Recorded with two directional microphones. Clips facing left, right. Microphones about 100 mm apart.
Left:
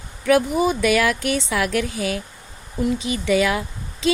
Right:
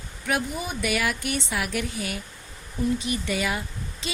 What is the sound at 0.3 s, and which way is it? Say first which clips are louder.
A woman's voice: left 11 dB; 90° left.